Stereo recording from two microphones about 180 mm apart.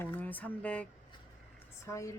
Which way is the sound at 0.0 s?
10° left (ahead or behind).